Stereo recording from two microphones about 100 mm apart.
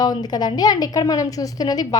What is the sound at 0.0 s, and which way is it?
A woman's voice, 40° left (ahead or behind).